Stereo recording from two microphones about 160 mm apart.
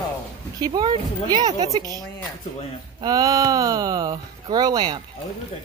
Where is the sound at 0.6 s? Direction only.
25° right (ahead or behind).